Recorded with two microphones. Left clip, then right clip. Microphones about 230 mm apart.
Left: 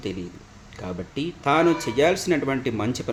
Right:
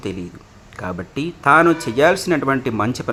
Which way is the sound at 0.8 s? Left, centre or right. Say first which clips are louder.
Right 5 dB; centre.